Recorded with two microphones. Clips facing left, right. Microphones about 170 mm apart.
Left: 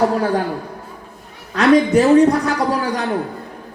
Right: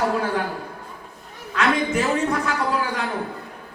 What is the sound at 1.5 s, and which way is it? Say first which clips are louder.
A man's voice: left 9 dB; 35° left (ahead or behind).